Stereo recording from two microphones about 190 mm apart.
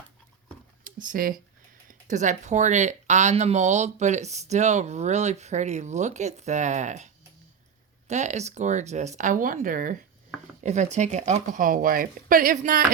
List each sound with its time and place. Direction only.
0.9 s speech: 45° right (ahead or behind)